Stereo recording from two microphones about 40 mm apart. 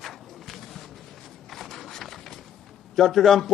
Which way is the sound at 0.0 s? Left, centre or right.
Centre.